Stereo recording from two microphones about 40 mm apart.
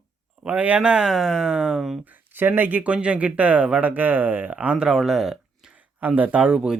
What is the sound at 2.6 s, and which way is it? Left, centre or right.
Speech, right.